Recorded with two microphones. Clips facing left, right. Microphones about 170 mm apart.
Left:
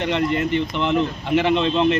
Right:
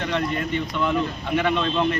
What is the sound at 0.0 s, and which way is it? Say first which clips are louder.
Speech: left 4 dB; 25° left (ahead or behind).